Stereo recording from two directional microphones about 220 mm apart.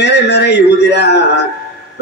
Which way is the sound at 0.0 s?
50° left (ahead or behind).